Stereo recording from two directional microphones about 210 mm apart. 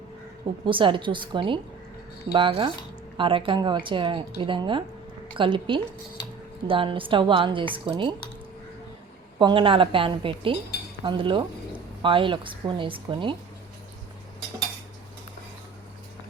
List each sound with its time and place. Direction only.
0.6 s a woman's voice: 25° right (ahead or behind)
9.4 s a woman's voice: 25° right (ahead or behind)